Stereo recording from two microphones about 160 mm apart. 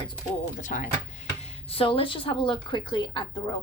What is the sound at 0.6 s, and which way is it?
Speech, 55° left (ahead or behind).